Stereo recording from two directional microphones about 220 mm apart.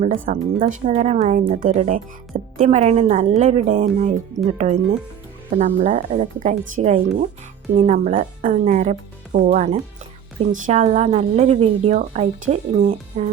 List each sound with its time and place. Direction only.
0.0 s a woman's voice: 35° right (ahead or behind)